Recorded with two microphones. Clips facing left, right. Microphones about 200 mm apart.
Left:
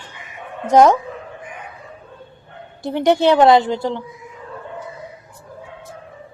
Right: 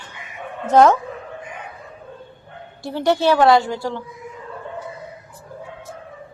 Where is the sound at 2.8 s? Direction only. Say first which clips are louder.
Left 3 dB; 20° left (ahead or behind).